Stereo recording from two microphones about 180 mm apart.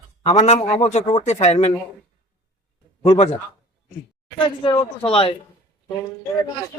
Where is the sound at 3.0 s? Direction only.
35° left (ahead or behind).